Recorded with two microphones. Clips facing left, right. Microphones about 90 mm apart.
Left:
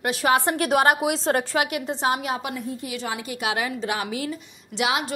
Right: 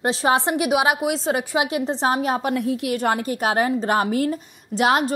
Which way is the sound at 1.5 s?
25° right (ahead or behind).